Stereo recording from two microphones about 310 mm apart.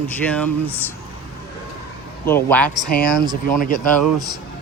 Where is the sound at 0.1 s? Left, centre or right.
Centre.